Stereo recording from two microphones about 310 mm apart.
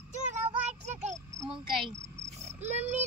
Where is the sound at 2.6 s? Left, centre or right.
Right.